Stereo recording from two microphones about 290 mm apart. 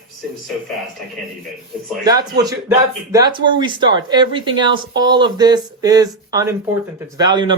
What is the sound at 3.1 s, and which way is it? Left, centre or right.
Speech, centre.